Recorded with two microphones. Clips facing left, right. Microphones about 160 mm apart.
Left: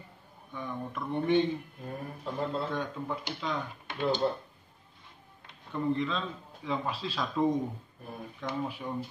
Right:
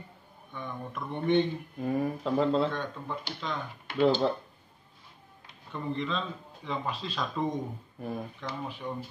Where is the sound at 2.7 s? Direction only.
10° left (ahead or behind).